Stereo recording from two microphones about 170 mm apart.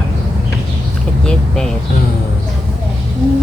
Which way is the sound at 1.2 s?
5° left (ahead or behind).